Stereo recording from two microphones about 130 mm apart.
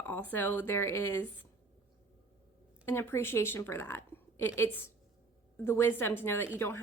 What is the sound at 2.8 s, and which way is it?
A woman's voice, 20° left (ahead or behind).